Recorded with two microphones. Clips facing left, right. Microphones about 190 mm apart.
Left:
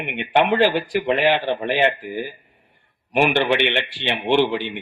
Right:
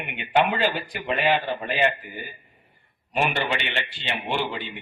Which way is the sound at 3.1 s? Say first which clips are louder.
Left 7 dB; 60° left (ahead or behind).